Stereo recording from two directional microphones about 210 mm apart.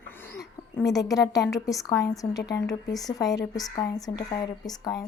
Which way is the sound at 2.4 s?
55° left (ahead or behind).